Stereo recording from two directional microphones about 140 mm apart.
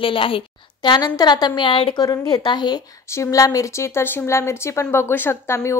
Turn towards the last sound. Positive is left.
turn(degrees=20)  # may be behind; listen again after turning